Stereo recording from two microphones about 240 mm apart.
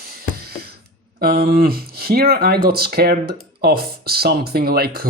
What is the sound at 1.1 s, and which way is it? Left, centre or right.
Speech, right.